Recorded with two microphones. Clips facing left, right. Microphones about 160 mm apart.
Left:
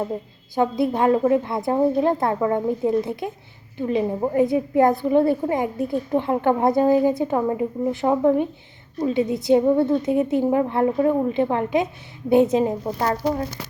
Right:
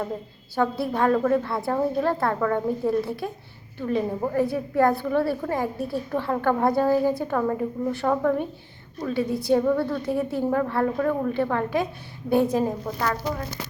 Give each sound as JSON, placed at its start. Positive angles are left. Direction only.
{"t": 0.5, "sound": "a woman's voice", "side_deg": 20}